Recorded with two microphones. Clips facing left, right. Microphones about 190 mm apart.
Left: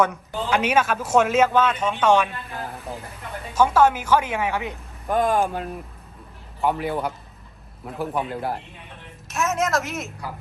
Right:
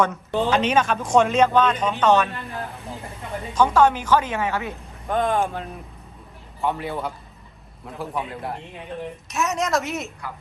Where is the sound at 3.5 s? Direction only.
5° left (ahead or behind).